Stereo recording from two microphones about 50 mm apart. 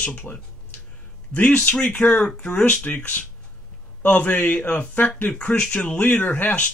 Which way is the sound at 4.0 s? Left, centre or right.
Left.